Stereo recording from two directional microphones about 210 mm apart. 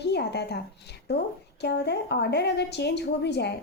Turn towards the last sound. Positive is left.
turn(degrees=55)  # may be behind; listen again after turning